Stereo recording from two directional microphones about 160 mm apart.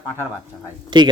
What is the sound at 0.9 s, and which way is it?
Speech, 30° right (ahead or behind).